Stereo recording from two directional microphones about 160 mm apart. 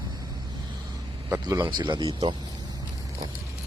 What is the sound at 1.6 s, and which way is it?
Speech, 25° right (ahead or behind).